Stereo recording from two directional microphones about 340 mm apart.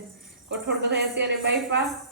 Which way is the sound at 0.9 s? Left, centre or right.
Right.